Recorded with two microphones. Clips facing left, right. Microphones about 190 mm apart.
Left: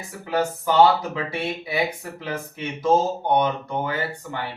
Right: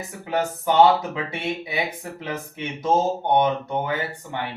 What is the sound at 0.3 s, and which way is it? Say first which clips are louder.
Speech: even; 20° right (ahead or behind).